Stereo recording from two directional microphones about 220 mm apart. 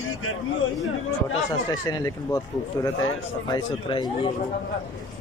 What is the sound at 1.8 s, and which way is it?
Speech, 15° left (ahead or behind).